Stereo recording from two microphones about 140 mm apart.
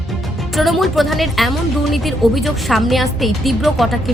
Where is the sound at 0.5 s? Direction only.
Centre (ahead or behind).